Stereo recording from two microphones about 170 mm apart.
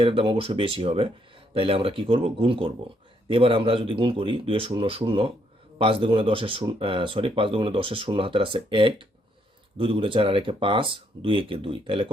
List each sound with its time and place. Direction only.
0.0 s speech: 35° right (ahead or behind)